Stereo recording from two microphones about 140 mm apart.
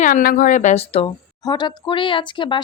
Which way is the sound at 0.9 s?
30° left (ahead or behind).